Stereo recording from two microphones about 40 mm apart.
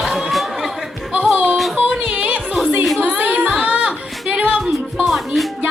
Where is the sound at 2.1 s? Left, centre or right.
Right.